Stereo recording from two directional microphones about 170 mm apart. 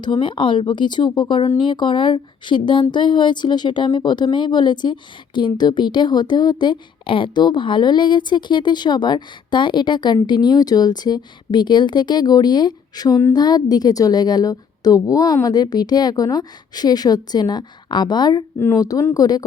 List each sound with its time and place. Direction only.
0.0 s speech: 25° left (ahead or behind)